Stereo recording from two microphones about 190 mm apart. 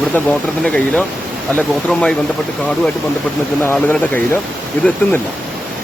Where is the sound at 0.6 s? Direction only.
5° left (ahead or behind).